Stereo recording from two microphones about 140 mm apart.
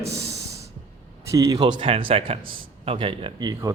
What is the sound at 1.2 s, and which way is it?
A man's voice, 20° right (ahead or behind).